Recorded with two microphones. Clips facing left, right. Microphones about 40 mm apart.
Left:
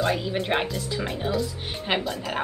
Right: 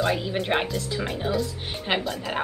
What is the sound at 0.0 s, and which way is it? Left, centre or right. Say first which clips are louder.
A woman's voice: even; centre.